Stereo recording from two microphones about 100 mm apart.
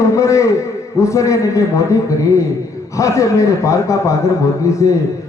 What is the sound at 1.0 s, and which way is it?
Speech, 30° left (ahead or behind).